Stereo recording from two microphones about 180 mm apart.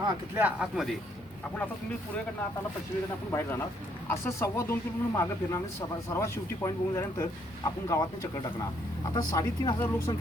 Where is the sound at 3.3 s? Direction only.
15° left (ahead or behind).